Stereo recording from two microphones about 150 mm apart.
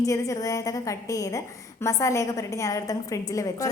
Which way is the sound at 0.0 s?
20° left (ahead or behind).